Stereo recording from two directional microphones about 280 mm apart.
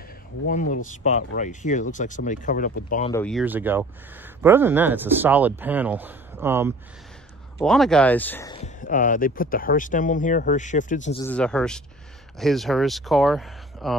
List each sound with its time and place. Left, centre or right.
0.5 s speech: left
3.1 s speech: centre
8.5 s speech: left
11.2 s speech: centre